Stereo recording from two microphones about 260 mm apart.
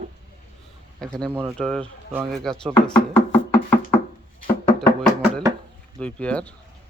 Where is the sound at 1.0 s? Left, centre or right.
Centre.